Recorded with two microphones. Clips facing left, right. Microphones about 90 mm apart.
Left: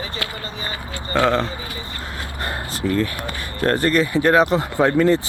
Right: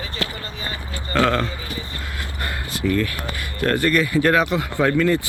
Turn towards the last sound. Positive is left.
turn(degrees=30)  # may be behind; listen again after turning